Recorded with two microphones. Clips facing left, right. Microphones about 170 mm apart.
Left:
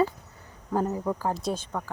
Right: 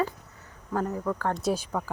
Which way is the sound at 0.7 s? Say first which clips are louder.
Left 2 dB; 20° left (ahead or behind).